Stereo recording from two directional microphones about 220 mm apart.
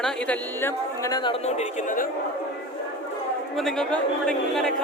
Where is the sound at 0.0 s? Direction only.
10° left (ahead or behind); by 2.0 s 35° left (ahead or behind).